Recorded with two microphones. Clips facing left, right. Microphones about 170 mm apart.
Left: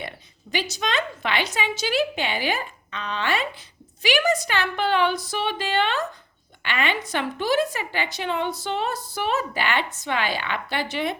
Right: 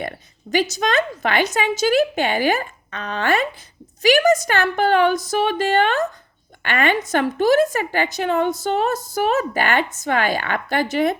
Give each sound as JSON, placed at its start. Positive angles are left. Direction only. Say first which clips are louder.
{"t": 0.5, "sound": "a woman's voice", "louder": "right 7 dB", "side_deg": -45}